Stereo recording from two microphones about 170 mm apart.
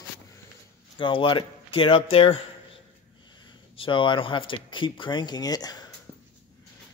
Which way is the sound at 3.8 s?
30° left (ahead or behind).